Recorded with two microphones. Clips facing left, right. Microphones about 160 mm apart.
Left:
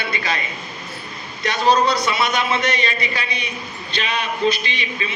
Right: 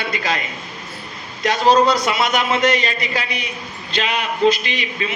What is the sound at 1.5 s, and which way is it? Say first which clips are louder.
Speech: right 3 dB; 40° right (ahead or behind).